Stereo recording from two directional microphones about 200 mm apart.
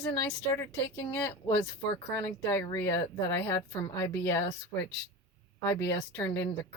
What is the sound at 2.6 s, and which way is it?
Speech, 20° left (ahead or behind).